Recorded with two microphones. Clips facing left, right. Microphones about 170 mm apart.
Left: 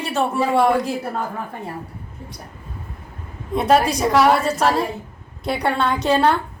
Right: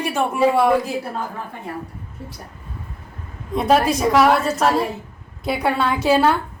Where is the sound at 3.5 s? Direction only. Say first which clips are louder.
Even; centre (ahead or behind).